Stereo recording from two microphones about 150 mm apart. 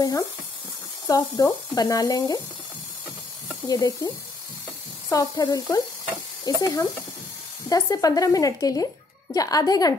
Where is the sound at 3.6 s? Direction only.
25° left (ahead or behind).